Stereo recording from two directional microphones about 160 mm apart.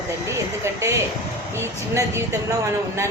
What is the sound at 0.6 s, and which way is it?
A woman's voice, 20° right (ahead or behind).